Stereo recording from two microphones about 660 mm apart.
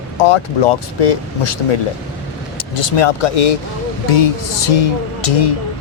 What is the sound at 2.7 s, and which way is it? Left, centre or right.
Speech, left.